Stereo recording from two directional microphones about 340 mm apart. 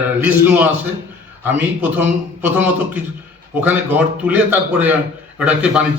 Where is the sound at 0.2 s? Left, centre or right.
Centre.